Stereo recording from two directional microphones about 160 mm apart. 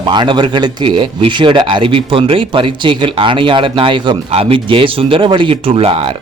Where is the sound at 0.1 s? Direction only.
30° right (ahead or behind).